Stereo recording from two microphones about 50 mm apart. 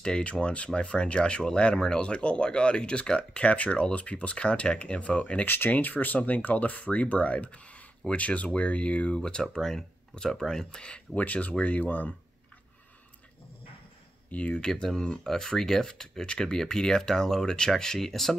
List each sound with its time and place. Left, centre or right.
0.2 s speech: left
5.4 s speech: left
9.4 s speech: centre
11.1 s speech: left
14.3 s speech: left
14.7 s speech: centre